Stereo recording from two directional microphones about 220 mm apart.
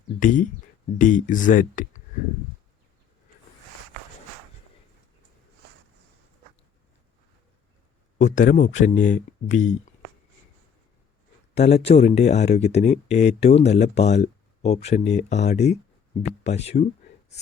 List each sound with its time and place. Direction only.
0.2 s speech: 35° left (ahead or behind)
8.2 s speech: 35° left (ahead or behind)
11.5 s speech: 30° left (ahead or behind)